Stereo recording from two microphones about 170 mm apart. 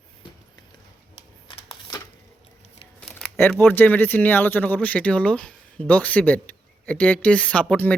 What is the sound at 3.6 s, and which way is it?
Speech, 10° left (ahead or behind).